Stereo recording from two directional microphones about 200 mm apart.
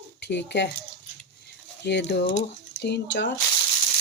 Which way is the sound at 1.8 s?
60° left (ahead or behind).